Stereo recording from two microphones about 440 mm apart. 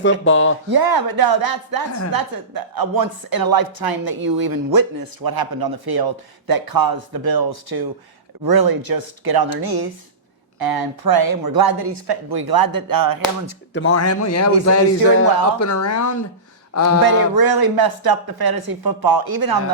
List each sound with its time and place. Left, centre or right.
0.0 s speech: left
0.7 s speech: right
13.7 s a man's voice: left
17.3 s speech: right